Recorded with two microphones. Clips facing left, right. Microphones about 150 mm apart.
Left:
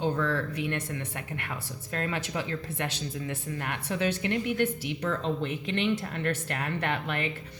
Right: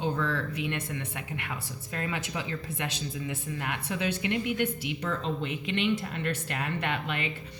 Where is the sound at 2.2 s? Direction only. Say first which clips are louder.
Left 2 dB; 15° right (ahead or behind).